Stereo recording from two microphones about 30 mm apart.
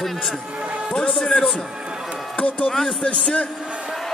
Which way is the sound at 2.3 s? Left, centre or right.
Left.